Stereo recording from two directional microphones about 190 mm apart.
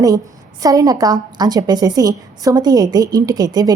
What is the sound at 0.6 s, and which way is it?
A woman's voice, 20° right (ahead or behind).